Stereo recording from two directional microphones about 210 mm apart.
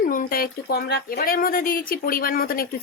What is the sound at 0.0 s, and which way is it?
A woman's voice, 40° left (ahead or behind).